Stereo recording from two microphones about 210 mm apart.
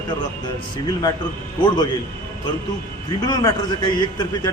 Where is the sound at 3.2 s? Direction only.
20° left (ahead or behind).